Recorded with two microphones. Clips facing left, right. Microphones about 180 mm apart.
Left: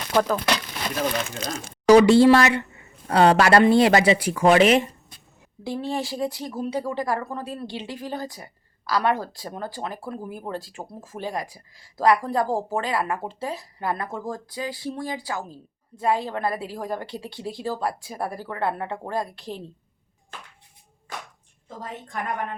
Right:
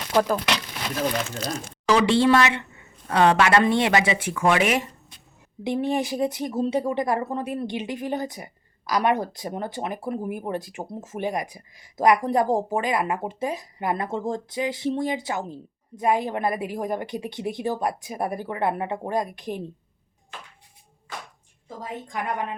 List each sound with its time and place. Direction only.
0.1 s speech: 10° right (ahead or behind)
1.9 s speech: 40° left (ahead or behind)
5.6 s speech: 20° right (ahead or behind)
21.8 s a woman's voice: 15° right (ahead or behind)